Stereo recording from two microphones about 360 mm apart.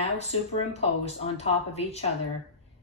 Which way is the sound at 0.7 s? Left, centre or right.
Centre.